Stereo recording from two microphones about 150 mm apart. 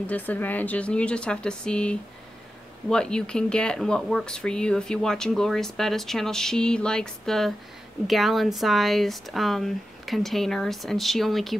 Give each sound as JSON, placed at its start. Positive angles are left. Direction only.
{"t": 0.0, "sound": "speech", "side_deg": 10}